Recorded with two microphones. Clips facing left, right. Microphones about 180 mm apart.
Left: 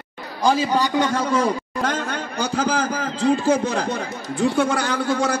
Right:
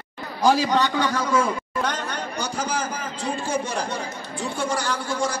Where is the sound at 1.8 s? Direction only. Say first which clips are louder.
Left 7 dB; 50° left (ahead or behind).